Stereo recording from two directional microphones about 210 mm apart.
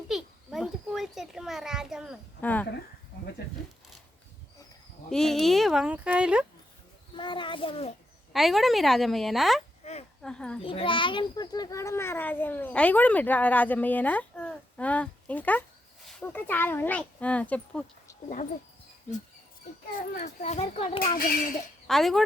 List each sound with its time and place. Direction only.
0.1 s a sound: centre (ahead or behind)
2.4 s speech: 10° left (ahead or behind)
5.0 s speech: centre (ahead or behind)
7.2 s a sound: 20° left (ahead or behind)
8.3 s speech: centre (ahead or behind)
9.8 s a sound: 30° left (ahead or behind)
10.2 s a child's voice: 5° left (ahead or behind)
10.6 s a child's voice: 25° left (ahead or behind); by 18.2 s 5° left (ahead or behind)
20.0 s a child's voice: 35° left (ahead or behind)
21.2 s dishes: 45° left (ahead or behind)
21.8 s speech: centre (ahead or behind)